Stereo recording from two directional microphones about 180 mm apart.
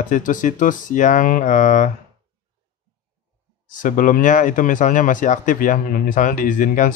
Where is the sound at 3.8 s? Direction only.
50° left (ahead or behind).